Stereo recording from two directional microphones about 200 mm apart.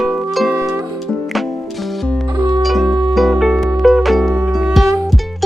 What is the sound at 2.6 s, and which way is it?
Music, centre (ahead or behind).